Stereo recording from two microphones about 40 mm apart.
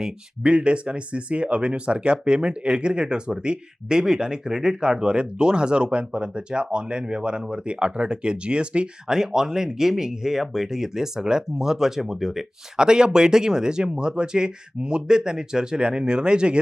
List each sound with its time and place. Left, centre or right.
0.0 s speech: right
9.1 s speech: centre